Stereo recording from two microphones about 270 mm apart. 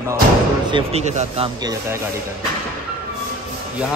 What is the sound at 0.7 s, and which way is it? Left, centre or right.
Speech, right.